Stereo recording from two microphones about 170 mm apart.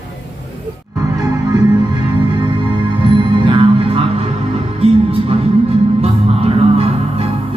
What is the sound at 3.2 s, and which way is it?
Music, 30° right (ahead or behind).